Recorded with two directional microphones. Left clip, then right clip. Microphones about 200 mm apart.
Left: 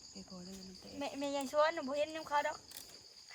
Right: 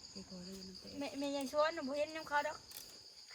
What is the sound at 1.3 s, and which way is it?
Speech, 30° left (ahead or behind).